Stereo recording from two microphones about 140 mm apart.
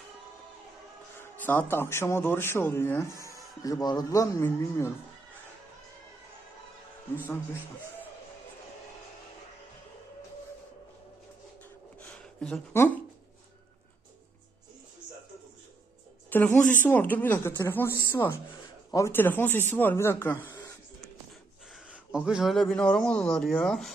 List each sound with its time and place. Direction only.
1.2 s speech: 15° left (ahead or behind)
11.9 s a sound: 5° left (ahead or behind)
16.3 s speech: 15° left (ahead or behind)
22.1 s speech: 5° right (ahead or behind)